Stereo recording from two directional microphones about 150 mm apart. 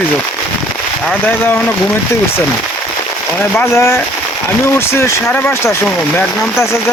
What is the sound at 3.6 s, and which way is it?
Speech, 15° left (ahead or behind).